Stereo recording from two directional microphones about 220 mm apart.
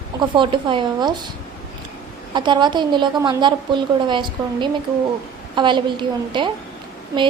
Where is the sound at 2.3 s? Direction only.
20° right (ahead or behind).